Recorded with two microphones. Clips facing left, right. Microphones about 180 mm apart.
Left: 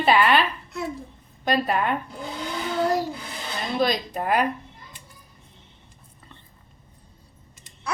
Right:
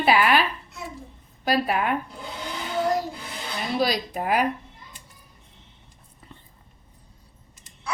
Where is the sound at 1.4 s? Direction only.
5° right (ahead or behind).